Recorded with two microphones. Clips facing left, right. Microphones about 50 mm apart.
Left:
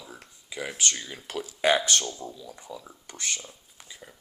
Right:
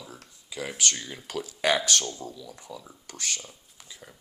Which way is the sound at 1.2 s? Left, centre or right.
Centre.